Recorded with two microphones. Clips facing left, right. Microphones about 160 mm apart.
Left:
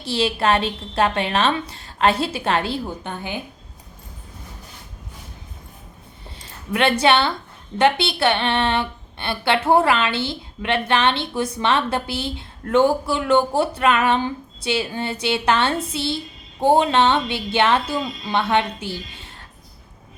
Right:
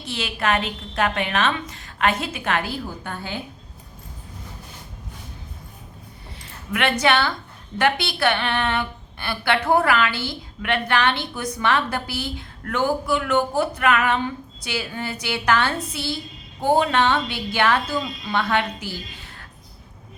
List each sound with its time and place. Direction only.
0.0 s a woman's voice: 30° left (ahead or behind)
6.7 s a woman's voice: 30° left (ahead or behind)